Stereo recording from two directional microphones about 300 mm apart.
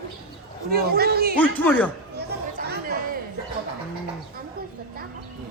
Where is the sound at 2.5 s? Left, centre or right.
Right.